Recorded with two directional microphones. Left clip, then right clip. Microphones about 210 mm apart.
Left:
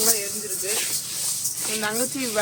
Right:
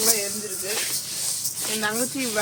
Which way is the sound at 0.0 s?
Centre (ahead or behind).